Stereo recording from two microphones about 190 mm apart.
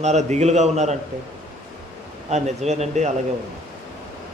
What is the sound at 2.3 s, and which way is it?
Speech, 35° right (ahead or behind).